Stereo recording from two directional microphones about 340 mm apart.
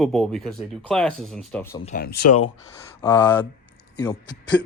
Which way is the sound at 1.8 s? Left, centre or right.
Left.